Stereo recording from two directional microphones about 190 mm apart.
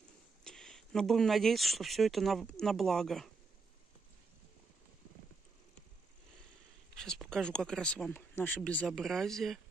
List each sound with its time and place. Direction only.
0.4 s speech: 5° left (ahead or behind)
7.0 s speech: 5° left (ahead or behind)